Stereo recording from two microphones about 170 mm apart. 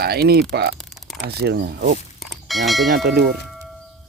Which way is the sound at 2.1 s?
Centre (ahead or behind).